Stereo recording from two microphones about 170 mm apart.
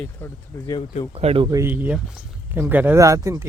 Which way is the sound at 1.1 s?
35° right (ahead or behind).